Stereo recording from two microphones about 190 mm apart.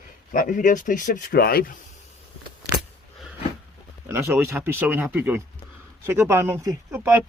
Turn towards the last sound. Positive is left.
turn(degrees=-15)  # may be behind; listen again after turning